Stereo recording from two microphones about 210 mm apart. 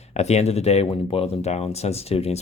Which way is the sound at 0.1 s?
30° left (ahead or behind).